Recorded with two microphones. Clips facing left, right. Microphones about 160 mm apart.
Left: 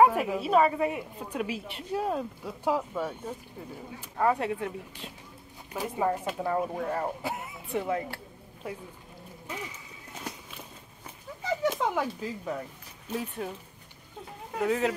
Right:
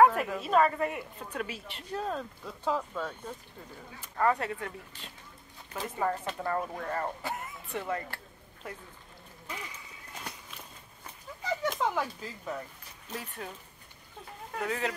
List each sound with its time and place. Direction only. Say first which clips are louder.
0.0 s a woman's voice: left 1 dB; 10° left (ahead or behind)
11.7 s a woman's voice: left 2 dB; 15° left (ahead or behind)